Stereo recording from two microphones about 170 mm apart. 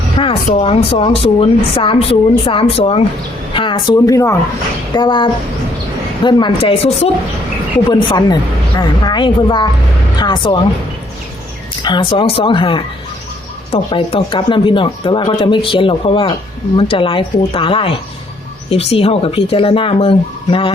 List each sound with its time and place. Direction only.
0.2 s speech: 35° left (ahead or behind)
8.8 s a woman's voice: 25° left (ahead or behind)
11.8 s speech: 30° left (ahead or behind)